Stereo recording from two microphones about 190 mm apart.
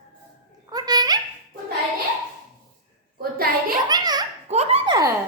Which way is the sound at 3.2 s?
50° right (ahead or behind).